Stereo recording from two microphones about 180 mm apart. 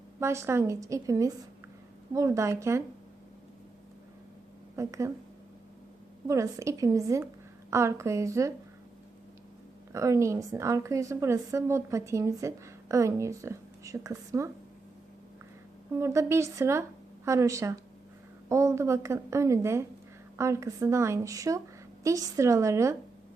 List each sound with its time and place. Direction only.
0.2 s a woman's voice: 15° right (ahead or behind)
4.8 s a woman's voice: 15° right (ahead or behind)
6.2 s a woman's voice: 15° right (ahead or behind)
9.9 s a woman's voice: 15° right (ahead or behind)
16.0 s a woman's voice: 15° right (ahead or behind)